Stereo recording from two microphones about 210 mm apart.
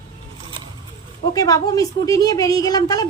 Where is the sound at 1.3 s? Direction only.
15° left (ahead or behind).